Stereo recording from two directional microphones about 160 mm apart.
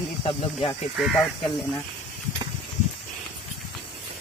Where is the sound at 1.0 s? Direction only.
Centre (ahead or behind).